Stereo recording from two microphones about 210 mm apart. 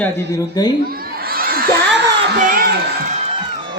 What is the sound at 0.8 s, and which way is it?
Crowd, 45° right (ahead or behind).